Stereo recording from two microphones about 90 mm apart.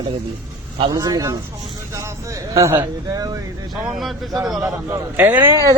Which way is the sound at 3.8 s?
5° right (ahead or behind).